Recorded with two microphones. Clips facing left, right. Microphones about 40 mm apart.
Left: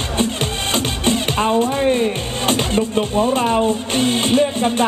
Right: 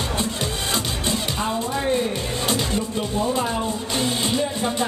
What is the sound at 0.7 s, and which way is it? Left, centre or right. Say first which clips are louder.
Music: left 8 dB; left.